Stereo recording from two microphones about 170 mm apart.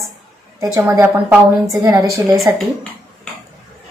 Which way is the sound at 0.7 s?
15° right (ahead or behind).